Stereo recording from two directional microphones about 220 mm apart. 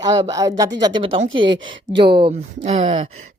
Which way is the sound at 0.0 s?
20° right (ahead or behind).